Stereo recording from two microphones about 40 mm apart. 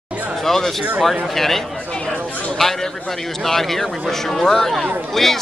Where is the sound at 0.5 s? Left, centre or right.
Centre.